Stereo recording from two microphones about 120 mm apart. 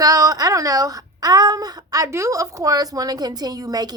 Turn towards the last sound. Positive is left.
turn(degrees=-30)  # may be behind; listen again after turning